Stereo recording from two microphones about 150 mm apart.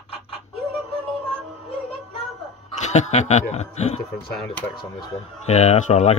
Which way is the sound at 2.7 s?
50° left (ahead or behind).